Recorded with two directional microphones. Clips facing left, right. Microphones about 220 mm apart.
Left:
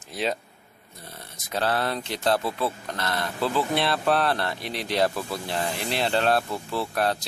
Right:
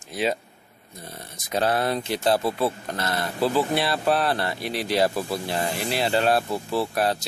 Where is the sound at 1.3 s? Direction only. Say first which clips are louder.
Right 3 dB; 15° right (ahead or behind).